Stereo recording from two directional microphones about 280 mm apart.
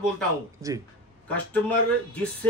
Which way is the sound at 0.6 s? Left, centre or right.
Centre.